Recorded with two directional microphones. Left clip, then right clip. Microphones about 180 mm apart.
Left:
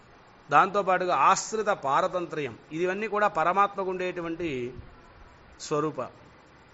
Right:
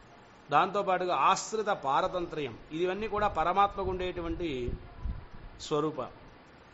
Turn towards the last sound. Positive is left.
turn(degrees=15)  # may be behind; listen again after turning